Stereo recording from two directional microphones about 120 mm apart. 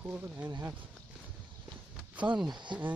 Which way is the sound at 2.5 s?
40° right (ahead or behind).